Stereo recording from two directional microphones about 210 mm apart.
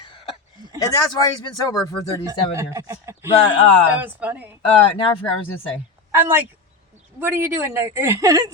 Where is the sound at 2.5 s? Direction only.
15° right (ahead or behind).